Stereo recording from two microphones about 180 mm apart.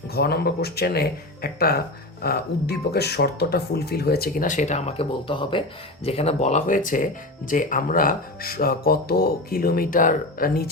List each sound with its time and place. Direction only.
0.1 s speech: 60° left (ahead or behind)